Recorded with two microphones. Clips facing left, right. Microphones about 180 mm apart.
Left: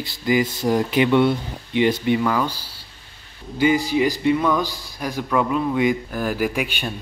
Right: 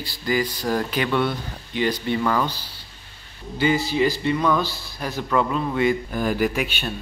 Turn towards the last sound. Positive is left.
turn(degrees=10)  # may be behind; listen again after turning